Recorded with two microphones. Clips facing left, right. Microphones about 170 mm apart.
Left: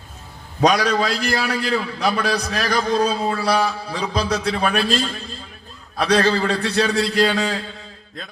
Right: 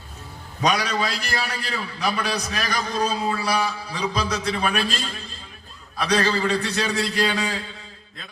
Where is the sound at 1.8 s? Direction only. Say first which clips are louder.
Left 4 dB; 55° left (ahead or behind).